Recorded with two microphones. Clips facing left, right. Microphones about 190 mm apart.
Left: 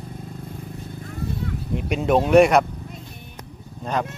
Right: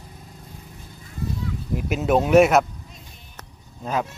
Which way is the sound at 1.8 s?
5° right (ahead or behind).